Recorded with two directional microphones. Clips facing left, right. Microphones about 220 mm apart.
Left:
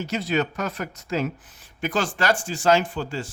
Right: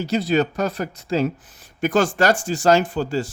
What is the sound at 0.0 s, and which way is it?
Speech, 35° right (ahead or behind).